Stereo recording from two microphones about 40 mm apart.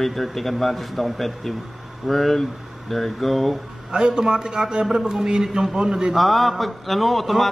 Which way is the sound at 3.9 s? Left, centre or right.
Centre.